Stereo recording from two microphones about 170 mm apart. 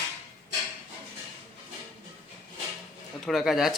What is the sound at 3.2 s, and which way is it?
Speech, centre (ahead or behind).